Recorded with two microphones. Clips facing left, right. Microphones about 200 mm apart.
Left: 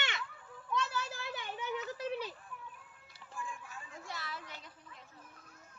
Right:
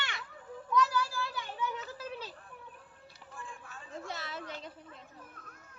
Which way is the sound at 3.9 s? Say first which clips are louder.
Right 5 dB; 25° right (ahead or behind).